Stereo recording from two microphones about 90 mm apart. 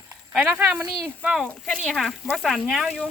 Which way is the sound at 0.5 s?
20° right (ahead or behind).